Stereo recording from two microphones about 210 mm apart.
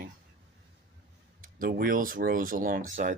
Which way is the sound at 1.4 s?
45° right (ahead or behind).